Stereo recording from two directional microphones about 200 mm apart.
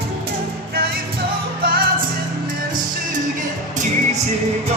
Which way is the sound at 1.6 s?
50° right (ahead or behind).